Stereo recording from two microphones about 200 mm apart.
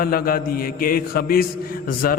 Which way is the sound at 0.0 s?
45° left (ahead or behind).